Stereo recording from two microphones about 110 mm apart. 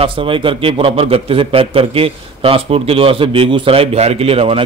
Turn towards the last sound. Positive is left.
turn(degrees=-60)  # may be behind; listen again after turning